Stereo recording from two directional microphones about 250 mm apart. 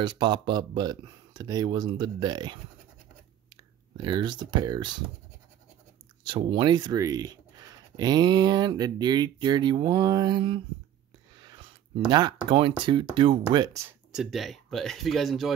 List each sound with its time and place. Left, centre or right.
0.0 s speech: centre
3.9 s speech: centre
6.2 s speech: centre
11.3 s a sound: centre
12.1 s speech: centre
14.1 s speech: centre